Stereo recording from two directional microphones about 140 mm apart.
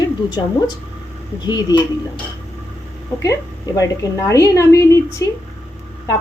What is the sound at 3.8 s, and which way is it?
A woman's voice, 25° left (ahead or behind).